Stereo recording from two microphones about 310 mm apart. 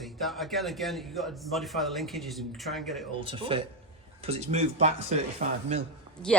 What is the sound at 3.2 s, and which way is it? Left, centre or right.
Speech, centre.